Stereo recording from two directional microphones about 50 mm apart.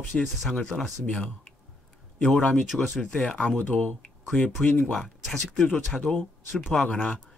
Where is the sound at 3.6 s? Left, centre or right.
Left.